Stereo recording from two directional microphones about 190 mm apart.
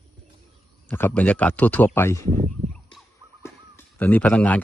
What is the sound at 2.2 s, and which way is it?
Speech, 40° right (ahead or behind).